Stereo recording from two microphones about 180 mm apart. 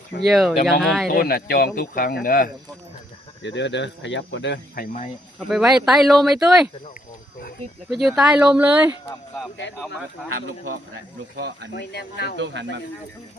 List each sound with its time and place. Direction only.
0.3 s speech: centre (ahead or behind)
1.1 s speech: 55° left (ahead or behind)
3.4 s speech: 80° left
4.7 s speech: 55° left (ahead or behind)
5.5 s speech: centre (ahead or behind)
7.9 s speech: centre (ahead or behind)
9.6 s speech: 90° left
11.3 s speech: 60° right (ahead or behind)
11.7 s speech: 65° left (ahead or behind)